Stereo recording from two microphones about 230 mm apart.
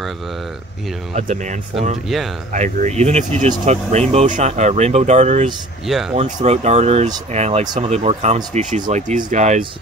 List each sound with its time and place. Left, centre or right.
1.1 s speech: right
5.9 s speech: centre
6.1 s speech: right